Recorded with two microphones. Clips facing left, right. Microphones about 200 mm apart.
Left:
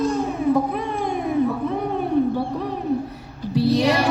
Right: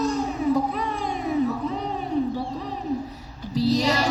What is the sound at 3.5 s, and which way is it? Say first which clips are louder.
Speech: left 3 dB; 60° left (ahead or behind).